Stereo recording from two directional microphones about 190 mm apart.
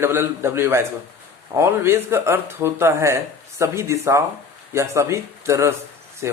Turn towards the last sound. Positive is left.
turn(degrees=-15)  # may be behind; listen again after turning